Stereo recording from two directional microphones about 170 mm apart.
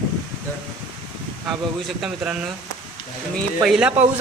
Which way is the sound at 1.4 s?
Centre (ahead or behind).